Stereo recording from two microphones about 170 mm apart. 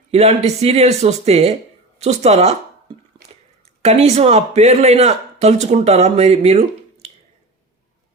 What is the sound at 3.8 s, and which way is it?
Speech, 40° right (ahead or behind).